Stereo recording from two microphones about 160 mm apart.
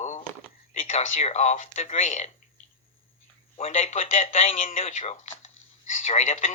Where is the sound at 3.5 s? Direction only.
40° left (ahead or behind).